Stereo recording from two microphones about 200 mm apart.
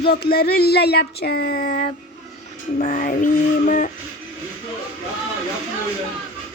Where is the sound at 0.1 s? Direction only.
50° left (ahead or behind).